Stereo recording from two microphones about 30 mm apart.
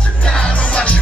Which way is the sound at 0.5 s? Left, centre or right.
Left.